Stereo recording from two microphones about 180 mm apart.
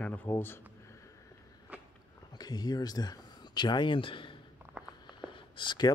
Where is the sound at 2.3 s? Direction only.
20° left (ahead or behind).